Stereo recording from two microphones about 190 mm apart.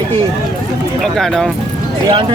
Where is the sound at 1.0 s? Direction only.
Centre (ahead or behind).